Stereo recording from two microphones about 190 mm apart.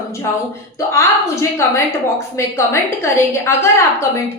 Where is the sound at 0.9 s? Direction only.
15° left (ahead or behind).